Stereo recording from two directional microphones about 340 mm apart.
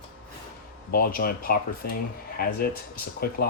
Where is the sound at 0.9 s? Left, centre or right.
Left.